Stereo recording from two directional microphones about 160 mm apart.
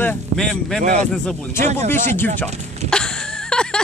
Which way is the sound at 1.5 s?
15° left (ahead or behind).